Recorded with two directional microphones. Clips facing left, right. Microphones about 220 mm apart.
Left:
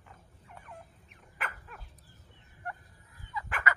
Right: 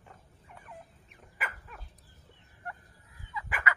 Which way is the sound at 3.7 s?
40° left (ahead or behind).